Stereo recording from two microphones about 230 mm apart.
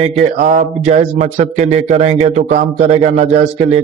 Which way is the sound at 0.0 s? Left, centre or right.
Right.